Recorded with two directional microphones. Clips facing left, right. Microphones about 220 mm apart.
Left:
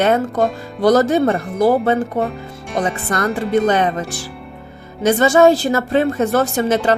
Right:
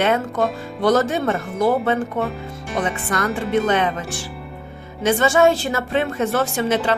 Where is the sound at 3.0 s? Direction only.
40° left (ahead or behind).